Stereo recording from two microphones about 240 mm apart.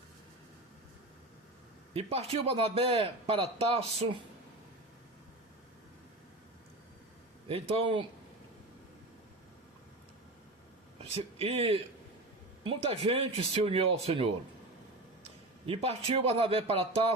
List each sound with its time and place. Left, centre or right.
1.9 s a man's voice: right
7.4 s a man's voice: right
11.0 s a man's voice: right